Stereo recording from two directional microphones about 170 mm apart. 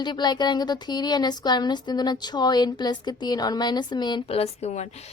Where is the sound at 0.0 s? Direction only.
25° left (ahead or behind).